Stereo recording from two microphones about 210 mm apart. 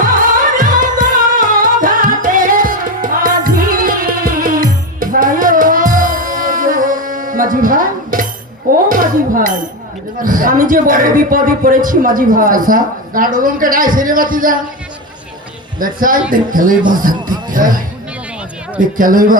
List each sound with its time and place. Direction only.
0.5 s music: 40° right (ahead or behind)
8.9 s dishes: 40° right (ahead or behind)
10.2 s a man's voice: 40° right (ahead or behind)
15.8 s a man's voice: 40° right (ahead or behind)